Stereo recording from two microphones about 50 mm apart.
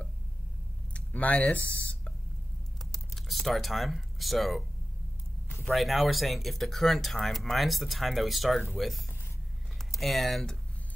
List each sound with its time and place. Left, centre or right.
0.9 s speech: left
2.9 s typing: centre
5.7 s speech: centre